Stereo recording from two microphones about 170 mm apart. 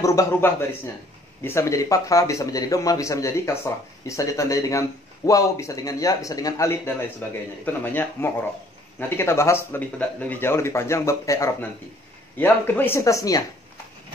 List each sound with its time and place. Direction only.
0.0 s a man's voice: 20° left (ahead or behind)